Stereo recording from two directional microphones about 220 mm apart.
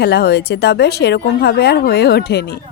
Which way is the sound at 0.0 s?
45° left (ahead or behind).